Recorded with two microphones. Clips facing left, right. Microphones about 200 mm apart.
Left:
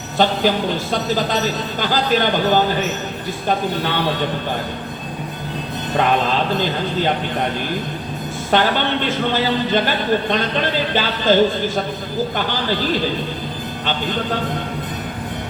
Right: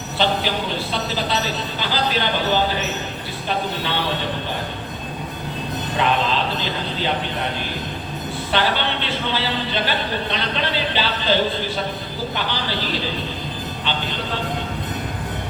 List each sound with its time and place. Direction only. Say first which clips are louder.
0.2 s speech: left 5 dB; 45° left (ahead or behind)
6.0 s speech: left 3 dB; 50° left (ahead or behind)
8.4 s speech: left 4 dB; 45° left (ahead or behind)